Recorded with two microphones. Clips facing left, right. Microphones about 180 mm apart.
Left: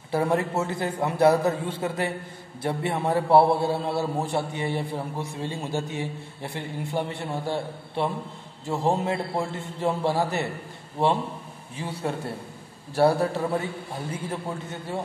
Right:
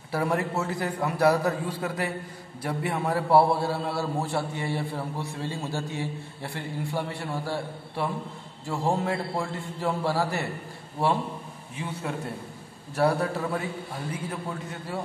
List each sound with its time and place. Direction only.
0.1 s a man's voice: 25° left (ahead or behind)
11.7 s a man's voice: 35° left (ahead or behind)